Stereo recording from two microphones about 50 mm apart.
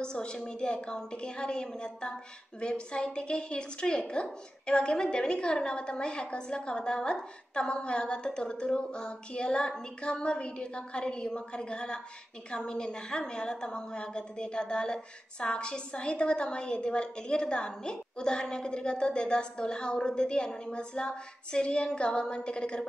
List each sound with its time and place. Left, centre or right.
0.0 s a woman's voice: centre